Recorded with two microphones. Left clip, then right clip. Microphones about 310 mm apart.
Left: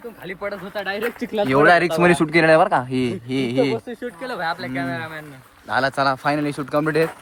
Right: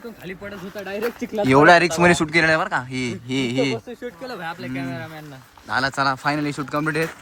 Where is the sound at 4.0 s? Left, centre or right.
Left.